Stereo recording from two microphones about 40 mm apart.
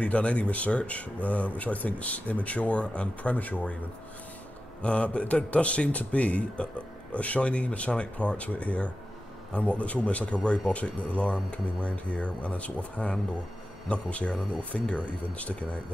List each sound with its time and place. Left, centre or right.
0.0 s speech: left
4.8 s speech: left